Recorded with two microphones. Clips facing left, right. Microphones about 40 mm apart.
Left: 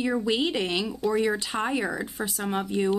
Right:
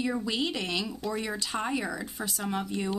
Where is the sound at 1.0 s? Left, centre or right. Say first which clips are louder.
Left 8 dB; centre.